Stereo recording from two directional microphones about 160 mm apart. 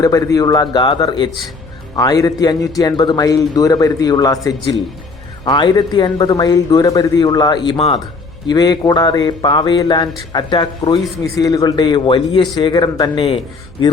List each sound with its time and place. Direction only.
0.0 s speech: 20° left (ahead or behind)
5.5 s speech: 30° left (ahead or behind)